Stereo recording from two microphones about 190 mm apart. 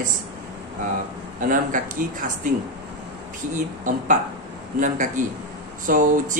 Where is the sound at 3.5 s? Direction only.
40° right (ahead or behind).